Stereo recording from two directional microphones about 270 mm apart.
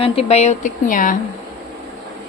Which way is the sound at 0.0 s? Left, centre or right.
Left.